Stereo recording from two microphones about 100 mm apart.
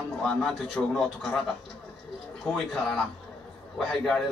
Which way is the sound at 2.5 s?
5° left (ahead or behind).